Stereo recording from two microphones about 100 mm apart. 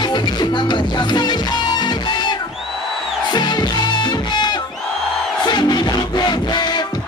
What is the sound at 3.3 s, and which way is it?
Music, 45° left (ahead or behind).